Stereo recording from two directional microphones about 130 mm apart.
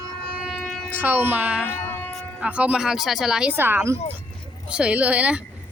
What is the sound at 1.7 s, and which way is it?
Music, 15° left (ahead or behind).